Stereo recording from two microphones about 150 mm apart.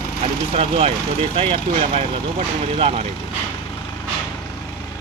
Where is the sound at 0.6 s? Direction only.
40° right (ahead or behind).